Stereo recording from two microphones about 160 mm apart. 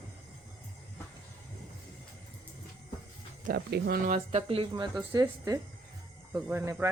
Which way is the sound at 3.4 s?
75° right (ahead or behind).